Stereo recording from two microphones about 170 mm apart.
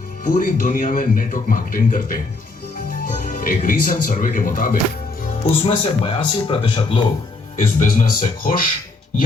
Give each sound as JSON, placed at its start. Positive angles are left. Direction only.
{"t": 0.3, "sound": "a man's voice", "side_deg": 50}
{"t": 5.4, "sound": "speech", "side_deg": 35}
{"t": 7.8, "sound": "a man's voice", "side_deg": 50}